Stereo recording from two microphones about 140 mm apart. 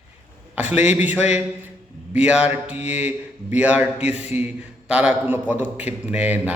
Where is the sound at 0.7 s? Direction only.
10° right (ahead or behind).